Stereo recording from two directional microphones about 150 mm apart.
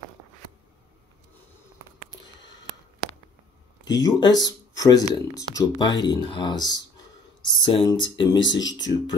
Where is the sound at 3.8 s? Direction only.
25° left (ahead or behind).